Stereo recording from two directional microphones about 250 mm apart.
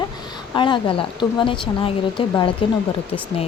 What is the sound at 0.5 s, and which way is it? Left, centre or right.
Speech, centre.